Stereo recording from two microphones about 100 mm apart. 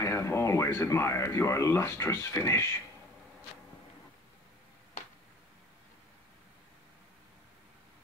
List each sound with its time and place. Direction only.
0.0 s speech: 30° left (ahead or behind)